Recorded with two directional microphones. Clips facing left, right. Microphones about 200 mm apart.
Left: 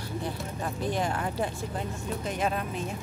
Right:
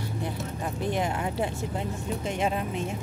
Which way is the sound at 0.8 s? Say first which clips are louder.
Right 1 dB; 20° right (ahead or behind).